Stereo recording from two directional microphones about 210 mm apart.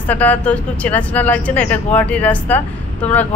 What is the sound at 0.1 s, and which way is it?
A man's voice, 5° left (ahead or behind).